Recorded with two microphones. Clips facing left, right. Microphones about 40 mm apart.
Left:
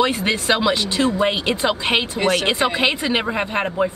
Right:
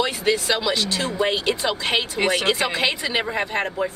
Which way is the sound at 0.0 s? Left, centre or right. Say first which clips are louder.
Left 2 dB; left.